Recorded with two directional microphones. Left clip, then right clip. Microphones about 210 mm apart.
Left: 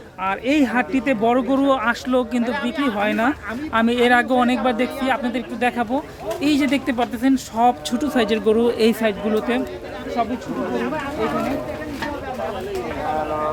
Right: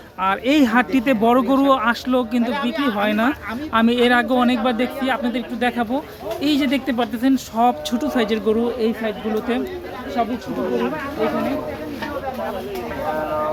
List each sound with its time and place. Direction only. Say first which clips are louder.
0.2 s speech: right 2 dB; 10° right (ahead or behind)
2.4 s speech: right 1 dB; 30° right (ahead or behind)
2.8 s speech: even; centre (ahead or behind)
8.8 s speech: left 4 dB; 55° left (ahead or behind)